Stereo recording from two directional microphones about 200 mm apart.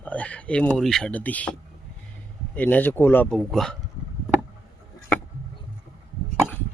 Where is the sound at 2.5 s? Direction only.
10° left (ahead or behind).